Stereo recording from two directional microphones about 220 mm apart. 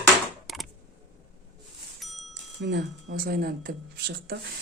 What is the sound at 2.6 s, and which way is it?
Speech, 50° right (ahead or behind).